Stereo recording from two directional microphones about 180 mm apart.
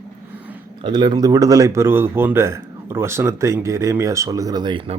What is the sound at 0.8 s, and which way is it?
Speech, 25° right (ahead or behind).